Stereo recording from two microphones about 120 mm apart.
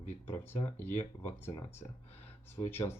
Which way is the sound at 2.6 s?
20° left (ahead or behind).